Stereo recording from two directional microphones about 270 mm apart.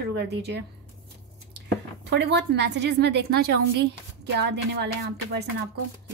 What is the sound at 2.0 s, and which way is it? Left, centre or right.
A woman's voice, right.